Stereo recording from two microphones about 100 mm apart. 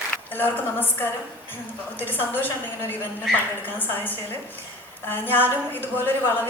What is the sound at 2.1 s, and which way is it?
Speech, 20° left (ahead or behind).